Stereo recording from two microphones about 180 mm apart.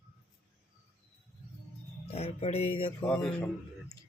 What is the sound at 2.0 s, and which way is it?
Speech, 35° left (ahead or behind).